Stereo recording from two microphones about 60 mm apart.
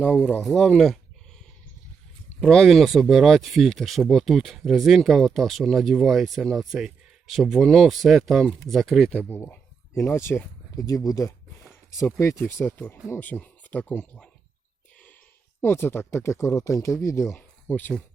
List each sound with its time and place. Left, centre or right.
0.3 s speech: centre
2.4 s speech: centre
2.6 s speech: centre
7.6 s speech: centre
9.0 s speech: left
9.4 s speech: left
10.8 s speech: left
12.6 s speech: left
13.2 s speech: left
15.6 s speech: left
17.7 s speech: left